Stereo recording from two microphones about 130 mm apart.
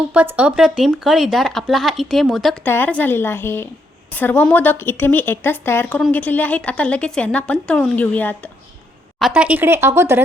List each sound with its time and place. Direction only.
0.1 s speech: 10° right (ahead or behind)
2.6 s a woman's voice: 15° left (ahead or behind)
9.3 s speech: 10° right (ahead or behind)